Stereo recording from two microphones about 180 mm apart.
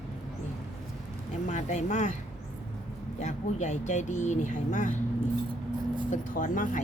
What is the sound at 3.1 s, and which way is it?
Speech, 40° left (ahead or behind).